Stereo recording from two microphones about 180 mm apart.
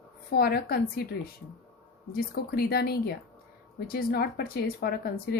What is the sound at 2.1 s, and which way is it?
Speech, 60° left (ahead or behind).